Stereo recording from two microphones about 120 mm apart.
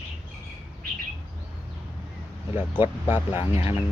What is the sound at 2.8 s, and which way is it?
Speech, 15° right (ahead or behind).